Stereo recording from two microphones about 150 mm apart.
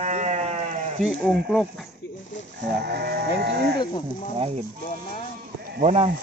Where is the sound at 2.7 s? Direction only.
90° right.